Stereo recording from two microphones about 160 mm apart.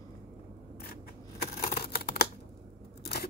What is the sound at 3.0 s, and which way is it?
Scissors, 75° left (ahead or behind).